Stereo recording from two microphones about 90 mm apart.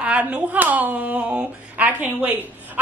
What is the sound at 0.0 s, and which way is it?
A woman's voice, 15° right (ahead or behind).